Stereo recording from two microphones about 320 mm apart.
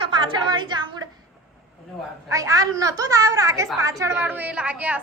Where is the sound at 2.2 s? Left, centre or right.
Centre.